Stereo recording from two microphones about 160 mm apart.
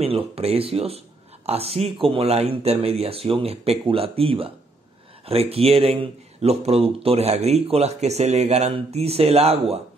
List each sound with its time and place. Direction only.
0.0 s speech: 40° right (ahead or behind)